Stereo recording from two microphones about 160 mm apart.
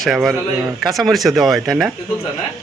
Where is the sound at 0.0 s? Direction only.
Centre (ahead or behind).